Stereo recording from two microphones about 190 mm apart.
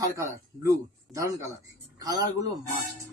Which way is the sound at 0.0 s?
15° right (ahead or behind).